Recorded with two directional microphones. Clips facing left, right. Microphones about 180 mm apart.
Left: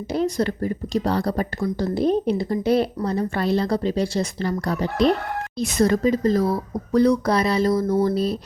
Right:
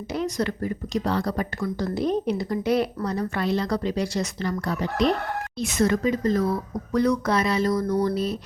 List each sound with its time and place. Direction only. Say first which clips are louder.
0.1 s speech: left 4 dB; 30° left (ahead or behind)